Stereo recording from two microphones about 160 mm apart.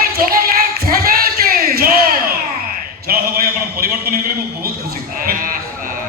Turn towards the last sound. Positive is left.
turn(degrees=-60)  # may be behind; listen again after turning